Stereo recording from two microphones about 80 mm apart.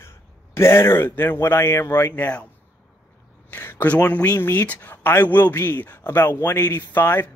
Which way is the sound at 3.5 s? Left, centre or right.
Left.